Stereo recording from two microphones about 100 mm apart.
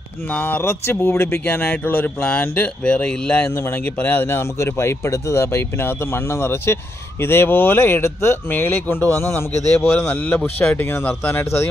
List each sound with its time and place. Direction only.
0.3 s speech: 15° left (ahead or behind)